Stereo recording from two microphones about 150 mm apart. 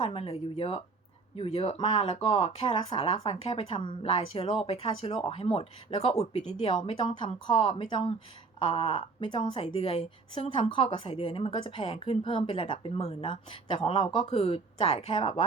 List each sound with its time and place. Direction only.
0.0 s speech: 40° left (ahead or behind)